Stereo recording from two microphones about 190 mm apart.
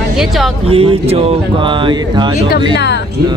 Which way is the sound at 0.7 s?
30° right (ahead or behind).